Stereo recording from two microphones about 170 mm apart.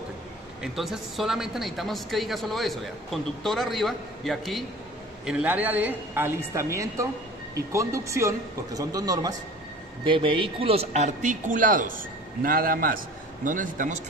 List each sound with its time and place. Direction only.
0.6 s a woman's voice: centre (ahead or behind); by 13.9 s 50° right (ahead or behind)